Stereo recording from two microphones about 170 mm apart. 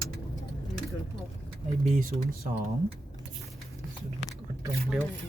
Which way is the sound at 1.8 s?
55° right (ahead or behind).